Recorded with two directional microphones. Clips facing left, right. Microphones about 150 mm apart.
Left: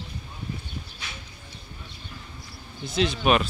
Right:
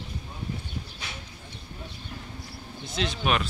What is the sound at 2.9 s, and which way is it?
Speech, 10° left (ahead or behind).